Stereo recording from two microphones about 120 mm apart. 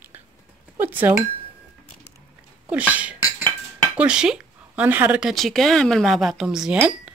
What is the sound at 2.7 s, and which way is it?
Speech, 10° right (ahead or behind).